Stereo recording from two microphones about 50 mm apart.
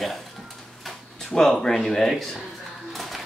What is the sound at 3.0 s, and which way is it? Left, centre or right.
Music, centre.